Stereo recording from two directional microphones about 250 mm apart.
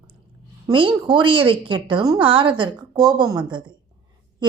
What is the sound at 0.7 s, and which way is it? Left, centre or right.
A woman's voice, centre.